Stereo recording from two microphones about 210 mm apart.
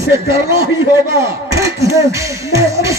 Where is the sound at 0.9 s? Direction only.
15° right (ahead or behind).